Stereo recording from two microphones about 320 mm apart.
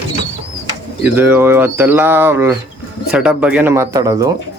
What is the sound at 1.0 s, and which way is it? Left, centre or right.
Speech, centre.